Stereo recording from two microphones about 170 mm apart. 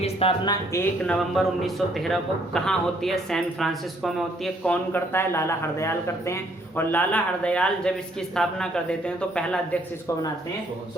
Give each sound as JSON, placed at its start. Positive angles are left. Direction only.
{"t": 0.0, "sound": "speech", "side_deg": 35}
{"t": 1.0, "sound": "a man's voice", "side_deg": 0}